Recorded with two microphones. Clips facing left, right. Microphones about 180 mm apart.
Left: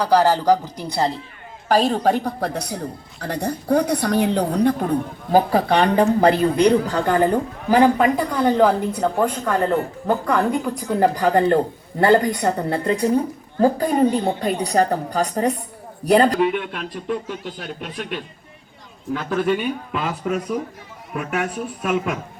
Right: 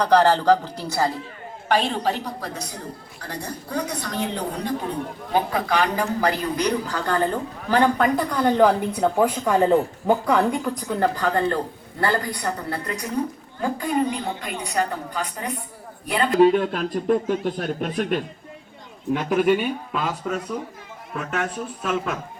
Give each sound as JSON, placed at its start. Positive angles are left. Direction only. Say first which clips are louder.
{"t": 0.0, "sound": "speech", "louder": "left 1 dB", "side_deg": 10}
{"t": 1.6, "sound": "a woman's voice", "louder": "left 5 dB", "side_deg": 40}
{"t": 5.3, "sound": "speech", "louder": "left 6 dB", "side_deg": 35}
{"t": 11.0, "sound": "speech", "louder": "left 5 dB", "side_deg": 15}
{"t": 13.6, "sound": "a woman's voice", "louder": "left 6 dB", "side_deg": 35}
{"t": 16.4, "sound": "speech", "louder": "right 5 dB", "side_deg": -35}
{"t": 19.1, "sound": "speech", "louder": "right 2 dB", "side_deg": -15}
{"t": 19.5, "sound": "speech", "louder": "left 1 dB", "side_deg": 0}